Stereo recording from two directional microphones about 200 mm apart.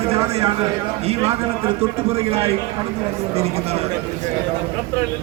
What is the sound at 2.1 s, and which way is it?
Speech, 30° right (ahead or behind).